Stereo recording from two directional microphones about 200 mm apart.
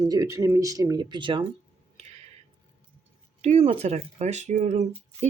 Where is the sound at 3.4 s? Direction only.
30° right (ahead or behind).